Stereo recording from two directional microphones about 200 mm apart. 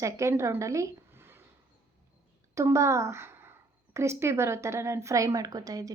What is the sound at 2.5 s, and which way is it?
A woman's voice, 15° right (ahead or behind).